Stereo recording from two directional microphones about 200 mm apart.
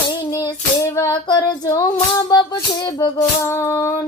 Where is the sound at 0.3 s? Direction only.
15° left (ahead or behind).